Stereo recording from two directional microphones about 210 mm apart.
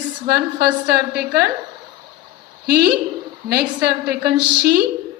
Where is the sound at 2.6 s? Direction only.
50° right (ahead or behind).